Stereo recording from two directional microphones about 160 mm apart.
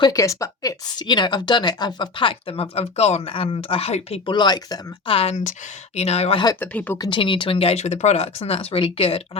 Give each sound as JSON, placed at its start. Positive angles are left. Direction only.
{"t": 0.0, "sound": "a woman's voice", "side_deg": 20}
{"t": 5.1, "sound": "speech", "side_deg": 40}
{"t": 6.6, "sound": "speech", "side_deg": 10}
{"t": 7.0, "sound": "speech", "side_deg": 30}